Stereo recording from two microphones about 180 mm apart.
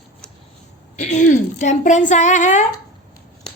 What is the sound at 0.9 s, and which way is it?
A woman's voice, 40° left (ahead or behind).